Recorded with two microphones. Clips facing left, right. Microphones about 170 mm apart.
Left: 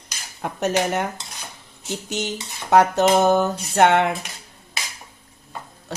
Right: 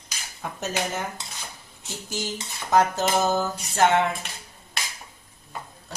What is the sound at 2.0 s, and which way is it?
A woman's voice, 70° left (ahead or behind).